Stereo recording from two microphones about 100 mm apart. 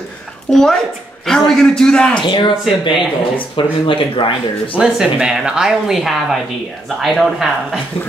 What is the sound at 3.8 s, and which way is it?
Speech, 60° left (ahead or behind).